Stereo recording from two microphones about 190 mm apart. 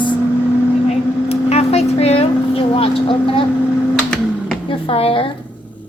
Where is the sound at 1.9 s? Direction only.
35° left (ahead or behind).